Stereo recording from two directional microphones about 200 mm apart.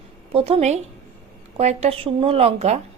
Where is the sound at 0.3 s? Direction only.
30° right (ahead or behind).